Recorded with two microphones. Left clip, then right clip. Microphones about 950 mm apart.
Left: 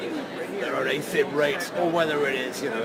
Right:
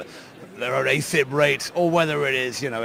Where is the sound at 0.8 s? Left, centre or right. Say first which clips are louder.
Right 3 dB; right.